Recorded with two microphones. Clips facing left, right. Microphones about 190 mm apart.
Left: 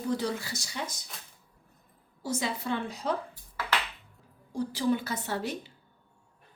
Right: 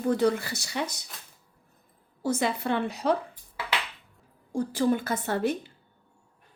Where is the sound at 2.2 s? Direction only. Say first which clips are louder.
Right 5 dB; 55° right (ahead or behind).